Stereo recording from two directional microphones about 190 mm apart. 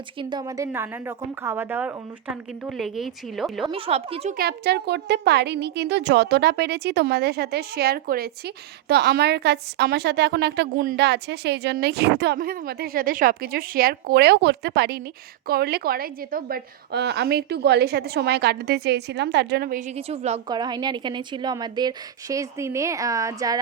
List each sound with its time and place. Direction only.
0.2 s a woman's voice: 25° right (ahead or behind); by 3.7 s centre (ahead or behind)
3.7 s a woman's voice: 30° right (ahead or behind)
4.4 s a woman's voice: 55° right (ahead or behind); by 20.4 s 35° right (ahead or behind)
20.5 s a woman's voice: 20° right (ahead or behind)